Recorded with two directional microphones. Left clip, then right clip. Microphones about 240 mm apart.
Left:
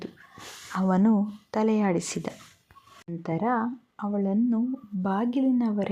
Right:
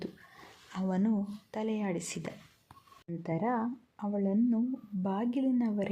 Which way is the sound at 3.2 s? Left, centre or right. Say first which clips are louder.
Left 6 dB; centre.